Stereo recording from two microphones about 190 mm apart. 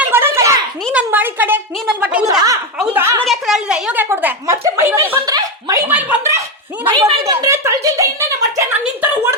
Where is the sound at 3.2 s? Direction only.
Centre (ahead or behind).